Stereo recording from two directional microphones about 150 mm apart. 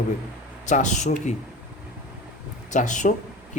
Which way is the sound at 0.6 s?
55° left (ahead or behind).